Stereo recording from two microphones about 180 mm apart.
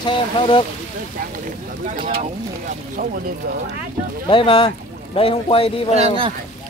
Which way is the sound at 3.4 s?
60° right (ahead or behind).